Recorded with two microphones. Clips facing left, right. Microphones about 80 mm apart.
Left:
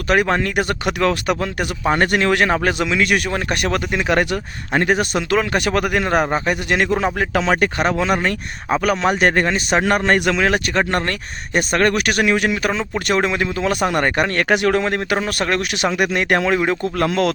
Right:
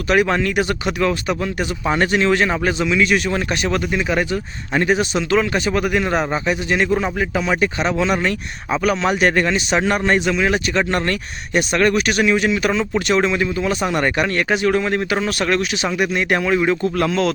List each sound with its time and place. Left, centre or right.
0.1 s a man's voice: left
4.7 s a man's voice: left
6.7 s a man's voice: left
9.9 s a man's voice: left
16.6 s a man's voice: left